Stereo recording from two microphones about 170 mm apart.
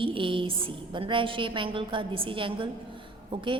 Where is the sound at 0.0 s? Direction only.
30° right (ahead or behind).